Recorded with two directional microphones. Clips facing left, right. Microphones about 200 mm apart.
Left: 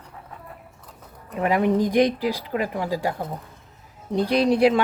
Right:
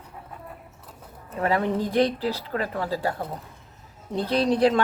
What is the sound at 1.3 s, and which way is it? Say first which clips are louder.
Speech: left 3 dB; 15° left (ahead or behind).